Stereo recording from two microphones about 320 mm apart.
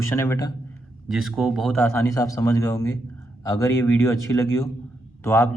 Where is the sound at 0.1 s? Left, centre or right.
Centre.